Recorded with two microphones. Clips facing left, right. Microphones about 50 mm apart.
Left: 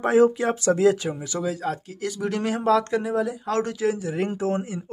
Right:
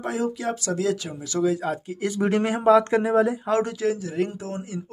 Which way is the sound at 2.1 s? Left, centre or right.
Right.